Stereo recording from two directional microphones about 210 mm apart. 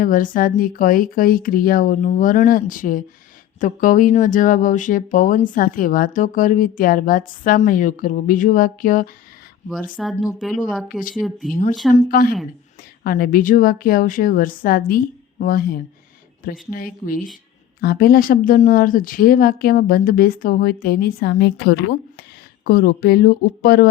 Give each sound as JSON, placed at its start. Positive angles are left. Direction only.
{"t": 0.0, "sound": "a woman's voice", "side_deg": 40}
{"t": 10.0, "sound": "speech", "side_deg": 0}
{"t": 11.9, "sound": "a woman's voice", "side_deg": 45}